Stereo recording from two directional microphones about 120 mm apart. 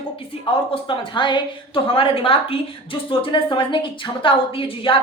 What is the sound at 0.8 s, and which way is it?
A woman's voice, 45° left (ahead or behind).